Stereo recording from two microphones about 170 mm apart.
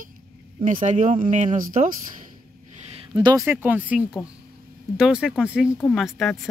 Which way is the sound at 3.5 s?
10° right (ahead or behind).